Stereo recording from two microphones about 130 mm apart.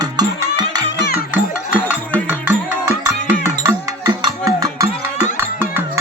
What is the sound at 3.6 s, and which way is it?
Cowbell, 25° right (ahead or behind).